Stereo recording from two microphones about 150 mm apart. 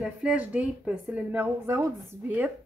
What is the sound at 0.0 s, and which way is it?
Speech, 5° right (ahead or behind).